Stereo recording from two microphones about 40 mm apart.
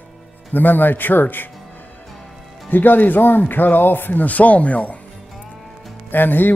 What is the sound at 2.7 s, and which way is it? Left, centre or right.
Speech, left.